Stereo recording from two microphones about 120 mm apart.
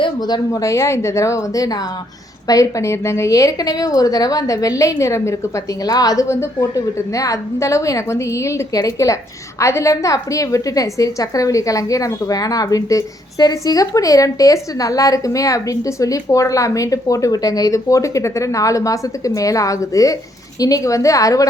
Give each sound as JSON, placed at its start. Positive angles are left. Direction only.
{"t": 0.0, "sound": "a woman's voice", "side_deg": 35}